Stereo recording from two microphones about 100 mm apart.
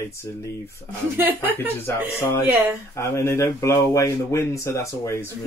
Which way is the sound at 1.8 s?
25° left (ahead or behind).